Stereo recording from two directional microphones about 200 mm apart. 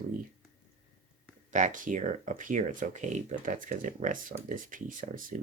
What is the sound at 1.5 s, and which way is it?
Speech, 40° right (ahead or behind).